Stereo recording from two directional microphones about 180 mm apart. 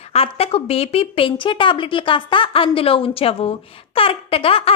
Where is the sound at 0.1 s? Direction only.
35° left (ahead or behind).